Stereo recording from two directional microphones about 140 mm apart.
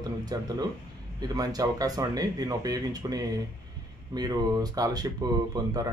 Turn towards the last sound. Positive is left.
turn(degrees=-30)  # may be behind; listen again after turning